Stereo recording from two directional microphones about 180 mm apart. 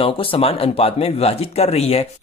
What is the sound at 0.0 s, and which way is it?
Speech, 30° left (ahead or behind).